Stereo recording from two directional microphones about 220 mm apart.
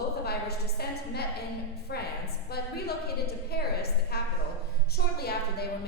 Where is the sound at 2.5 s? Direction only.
45° left (ahead or behind).